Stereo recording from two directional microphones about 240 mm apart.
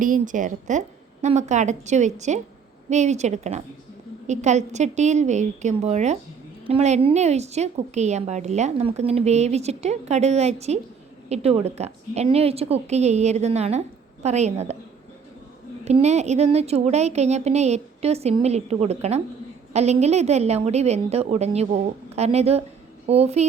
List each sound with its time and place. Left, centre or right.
0.0 s a woman's voice: right
15.8 s a woman's voice: right